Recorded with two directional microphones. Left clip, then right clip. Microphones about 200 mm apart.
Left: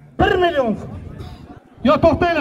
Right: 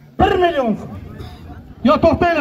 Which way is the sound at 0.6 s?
10° left (ahead or behind).